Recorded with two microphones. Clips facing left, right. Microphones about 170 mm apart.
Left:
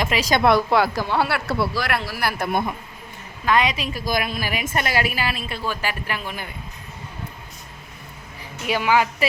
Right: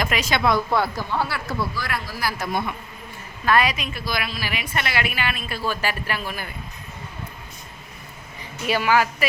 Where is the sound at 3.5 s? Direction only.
20° left (ahead or behind).